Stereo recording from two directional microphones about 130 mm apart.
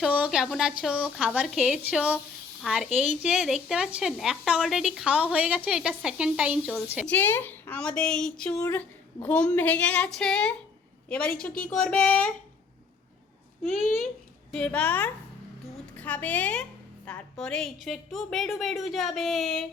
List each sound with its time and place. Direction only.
0.0 s a woman's voice: 10° right (ahead or behind)
7.0 s a woman's voice: 15° left (ahead or behind)
8.6 s a woman's voice: 25° left (ahead or behind)
9.2 s a woman's voice: 10° left (ahead or behind)
13.7 s a woman's voice: centre (ahead or behind)
14.5 s a woman's voice: 10° left (ahead or behind)